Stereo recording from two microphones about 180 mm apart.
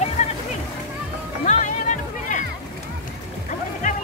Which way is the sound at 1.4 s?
45° left (ahead or behind).